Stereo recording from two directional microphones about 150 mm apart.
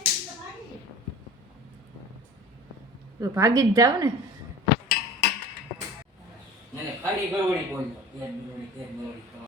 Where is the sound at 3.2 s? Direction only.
20° right (ahead or behind).